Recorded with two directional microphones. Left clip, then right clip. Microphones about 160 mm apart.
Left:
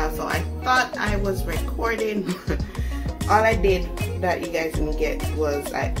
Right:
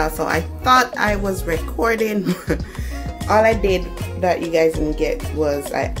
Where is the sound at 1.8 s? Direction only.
70° right (ahead or behind); by 4.7 s 55° right (ahead or behind).